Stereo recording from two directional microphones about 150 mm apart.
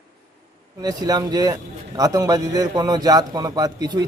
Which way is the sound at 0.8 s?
25° right (ahead or behind).